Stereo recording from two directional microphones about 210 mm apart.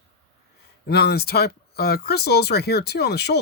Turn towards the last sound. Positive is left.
turn(degrees=50)  # may be behind; listen again after turning